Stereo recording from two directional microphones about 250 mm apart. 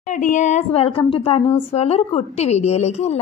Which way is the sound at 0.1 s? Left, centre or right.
Left.